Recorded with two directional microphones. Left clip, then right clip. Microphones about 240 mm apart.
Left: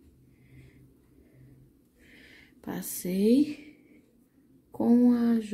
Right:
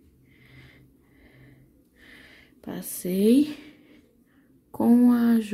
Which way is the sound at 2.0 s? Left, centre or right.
Centre.